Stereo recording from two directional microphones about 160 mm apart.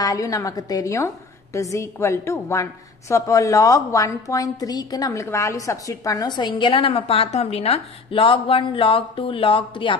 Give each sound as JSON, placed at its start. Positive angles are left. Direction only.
{"t": 0.0, "sound": "a woman's voice", "side_deg": 20}